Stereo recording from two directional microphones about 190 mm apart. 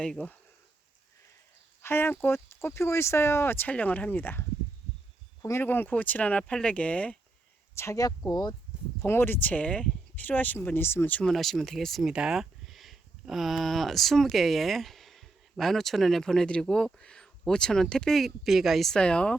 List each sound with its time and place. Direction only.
0.0 s speech: 5° left (ahead or behind)
1.8 s speech: 10° left (ahead or behind)